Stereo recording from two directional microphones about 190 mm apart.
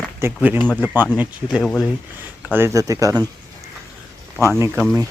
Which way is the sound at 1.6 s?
5° left (ahead or behind).